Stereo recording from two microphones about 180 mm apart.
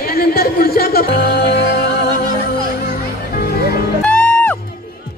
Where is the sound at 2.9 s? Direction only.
60° left (ahead or behind).